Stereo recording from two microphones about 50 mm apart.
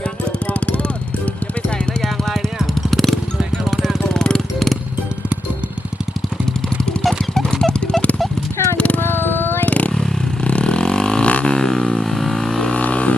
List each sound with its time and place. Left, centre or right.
0.3 s music: left
2.7 s music: centre
7.0 s clip-clop: centre
8.5 s horse: left
9.0 s a sound: left
9.6 s motorcycle: left
9.9 s vehicle: centre
10.4 s didgeridoo: left
11.5 s a sound: centre
12.7 s a sound: left